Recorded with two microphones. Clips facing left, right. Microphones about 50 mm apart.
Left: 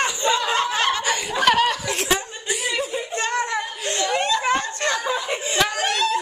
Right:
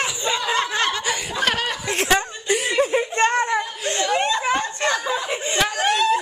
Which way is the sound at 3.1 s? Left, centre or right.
Right.